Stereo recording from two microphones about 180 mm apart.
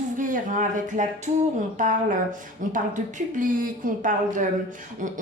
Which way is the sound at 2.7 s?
45° right (ahead or behind).